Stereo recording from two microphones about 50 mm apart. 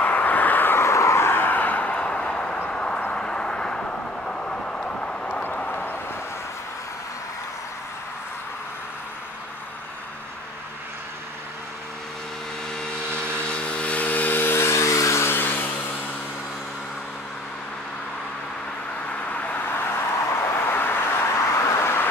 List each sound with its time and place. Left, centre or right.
0.0 s vehicle: left
0.7 s vehicle: left
1.4 s vehicle: left
5.7 s vehicle: left
13.5 s vehicle: left
14.4 s a sound: left
15.2 s a sound: left
19.2 s vehicle: left
20.6 s vehicle: left
21.4 s a sound: left